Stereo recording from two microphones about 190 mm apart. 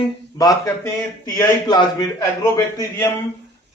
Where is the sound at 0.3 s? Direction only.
20° left (ahead or behind).